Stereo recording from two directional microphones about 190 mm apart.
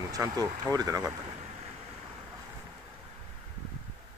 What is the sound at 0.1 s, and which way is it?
Speech, 20° right (ahead or behind).